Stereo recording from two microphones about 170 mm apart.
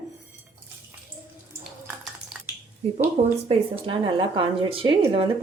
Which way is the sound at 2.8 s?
35° right (ahead or behind).